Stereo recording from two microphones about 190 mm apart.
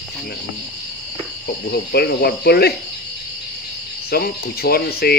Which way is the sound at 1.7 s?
55° left (ahead or behind).